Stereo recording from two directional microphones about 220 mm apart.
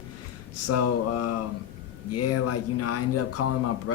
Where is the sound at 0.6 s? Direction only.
90° left.